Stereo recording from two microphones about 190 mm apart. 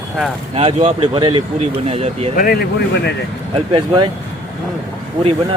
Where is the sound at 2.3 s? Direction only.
50° left (ahead or behind).